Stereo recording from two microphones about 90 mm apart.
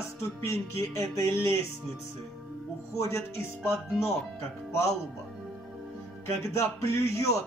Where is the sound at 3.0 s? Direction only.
30° left (ahead or behind).